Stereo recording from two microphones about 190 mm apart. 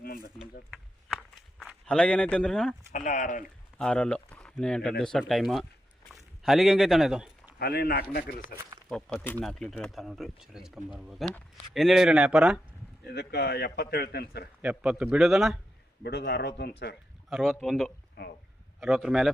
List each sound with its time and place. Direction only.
0.0 s a sound: 50° left (ahead or behind)
0.7 s walk: centre (ahead or behind)
2.9 s speech: 40° left (ahead or behind)
3.8 s speech: 5° left (ahead or behind)
7.6 s a man's voice: 55° left (ahead or behind)
8.9 s speech: 5° left (ahead or behind)
13.1 s a man's voice: 60° left (ahead or behind)
14.6 s speech: 5° right (ahead or behind)
16.0 s a man's voice: 60° left (ahead or behind)
17.2 s speech: centre (ahead or behind)
18.2 s a man's voice: 55° left (ahead or behind)
18.8 s speech: centre (ahead or behind)